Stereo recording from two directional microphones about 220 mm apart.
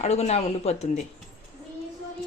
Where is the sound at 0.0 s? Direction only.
30° left (ahead or behind).